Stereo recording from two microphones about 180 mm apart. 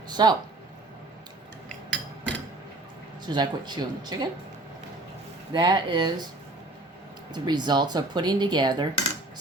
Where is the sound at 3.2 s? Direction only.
25° right (ahead or behind).